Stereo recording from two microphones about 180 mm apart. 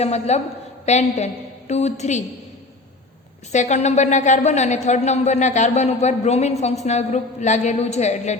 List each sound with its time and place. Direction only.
0.0 s a woman's voice: 35° left (ahead or behind)
3.5 s speech: 40° left (ahead or behind)